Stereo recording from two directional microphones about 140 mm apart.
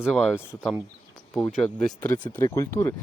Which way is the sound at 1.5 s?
5° left (ahead or behind).